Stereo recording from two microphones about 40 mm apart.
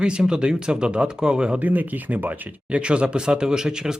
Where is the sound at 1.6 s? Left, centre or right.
Right.